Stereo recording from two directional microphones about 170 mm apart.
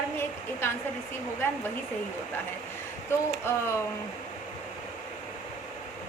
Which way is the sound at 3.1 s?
15° left (ahead or behind).